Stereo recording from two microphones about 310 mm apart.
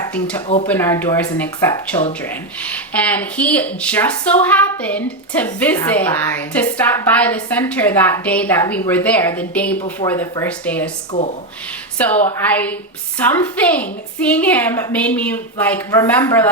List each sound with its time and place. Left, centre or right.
0.1 s speech: centre
0.4 s speech: left
0.7 s speech: centre